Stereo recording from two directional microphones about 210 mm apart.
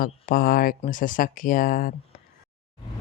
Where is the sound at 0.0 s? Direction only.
45° left (ahead or behind).